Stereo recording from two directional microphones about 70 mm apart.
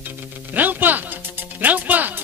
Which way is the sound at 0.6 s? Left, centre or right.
Right.